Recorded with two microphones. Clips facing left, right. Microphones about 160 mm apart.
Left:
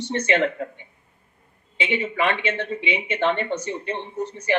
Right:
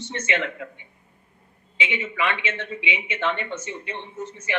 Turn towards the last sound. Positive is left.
turn(degrees=35)  # may be behind; listen again after turning